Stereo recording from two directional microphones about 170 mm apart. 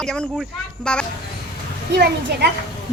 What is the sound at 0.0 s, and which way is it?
A woman's voice, centre (ahead or behind).